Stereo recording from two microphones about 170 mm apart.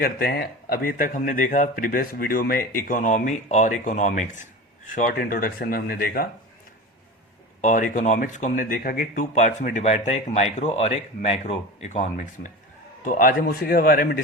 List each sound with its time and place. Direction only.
0.0 s speech: 70° left (ahead or behind)
7.6 s speech: 50° left (ahead or behind)